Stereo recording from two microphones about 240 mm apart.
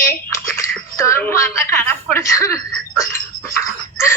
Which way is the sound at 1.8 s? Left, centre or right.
Centre.